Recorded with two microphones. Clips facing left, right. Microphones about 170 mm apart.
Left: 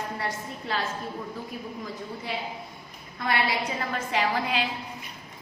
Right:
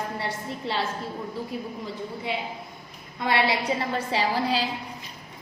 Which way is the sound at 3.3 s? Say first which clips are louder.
Right 3 dB; 25° right (ahead or behind).